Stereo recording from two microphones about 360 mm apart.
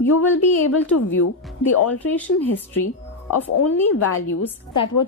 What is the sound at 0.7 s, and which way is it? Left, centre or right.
A woman's voice, left.